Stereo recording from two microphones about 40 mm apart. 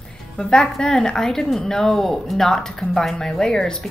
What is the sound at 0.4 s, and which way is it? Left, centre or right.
A woman's voice, centre.